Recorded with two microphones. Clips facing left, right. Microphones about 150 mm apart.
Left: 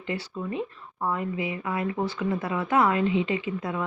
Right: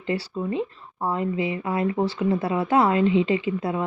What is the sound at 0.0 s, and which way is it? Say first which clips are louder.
Speech: right 5 dB; 35° right (ahead or behind).